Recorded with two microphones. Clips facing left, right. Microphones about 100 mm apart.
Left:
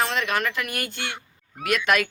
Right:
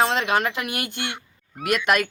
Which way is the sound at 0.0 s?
30° right (ahead or behind).